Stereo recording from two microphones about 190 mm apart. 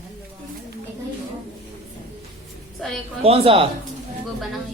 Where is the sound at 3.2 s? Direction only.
30° right (ahead or behind).